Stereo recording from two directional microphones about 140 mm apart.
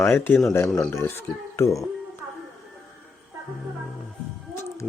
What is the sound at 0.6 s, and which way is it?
Speech, 5° left (ahead or behind).